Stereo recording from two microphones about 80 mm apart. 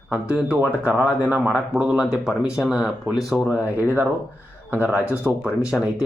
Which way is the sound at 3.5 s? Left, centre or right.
Right.